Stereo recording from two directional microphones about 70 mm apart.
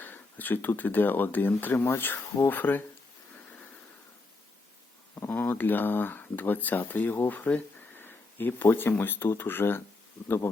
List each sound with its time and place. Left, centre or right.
0.0 s speech: left
5.1 s speech: left